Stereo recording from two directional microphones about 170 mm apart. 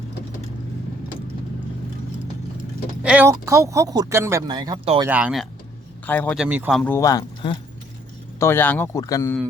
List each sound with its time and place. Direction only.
3.0 s speech: 5° right (ahead or behind)
3.2 s speech: 15° right (ahead or behind)
5.0 s speech: 10° right (ahead or behind)
6.1 s speech: 10° left (ahead or behind)
6.3 s speech: 5° right (ahead or behind)
6.7 s speech: 10° left (ahead or behind)